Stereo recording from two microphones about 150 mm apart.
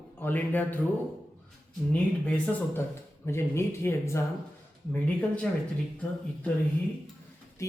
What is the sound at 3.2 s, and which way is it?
Speech, 15° left (ahead or behind).